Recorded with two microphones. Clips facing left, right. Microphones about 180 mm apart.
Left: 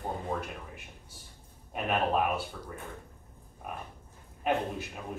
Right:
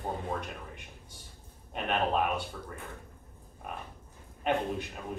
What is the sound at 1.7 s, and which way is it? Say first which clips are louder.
Speech: left 1 dB; 5° left (ahead or behind).